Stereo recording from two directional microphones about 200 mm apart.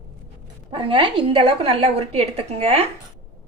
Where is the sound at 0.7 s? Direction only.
25° right (ahead or behind).